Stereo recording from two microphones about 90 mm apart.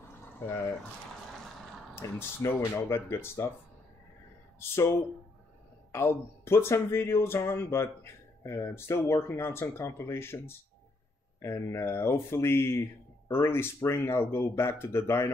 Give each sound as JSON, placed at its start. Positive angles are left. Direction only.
{"t": 2.0, "sound": "speech", "side_deg": 30}
{"t": 4.6, "sound": "speech", "side_deg": 30}